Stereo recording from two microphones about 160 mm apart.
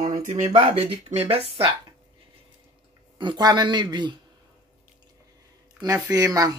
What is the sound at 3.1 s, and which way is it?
A man's voice, 30° right (ahead or behind).